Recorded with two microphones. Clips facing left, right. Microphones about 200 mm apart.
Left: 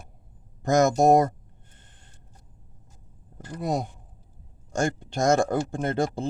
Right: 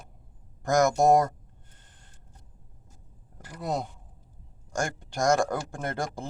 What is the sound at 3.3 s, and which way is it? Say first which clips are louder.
Speech: left 3 dB; 20° left (ahead or behind).